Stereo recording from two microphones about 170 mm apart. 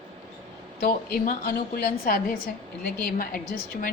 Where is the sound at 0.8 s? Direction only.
60° left (ahead or behind).